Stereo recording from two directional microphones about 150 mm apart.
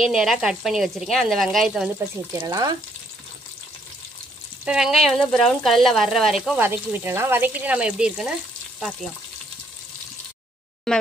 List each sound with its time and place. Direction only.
0.0 s speech: centre (ahead or behind)
2.4 s frying: 25° right (ahead or behind)
4.6 s speech: 5° right (ahead or behind)
8.7 s frying: centre (ahead or behind)
10.9 s speech: 5° left (ahead or behind)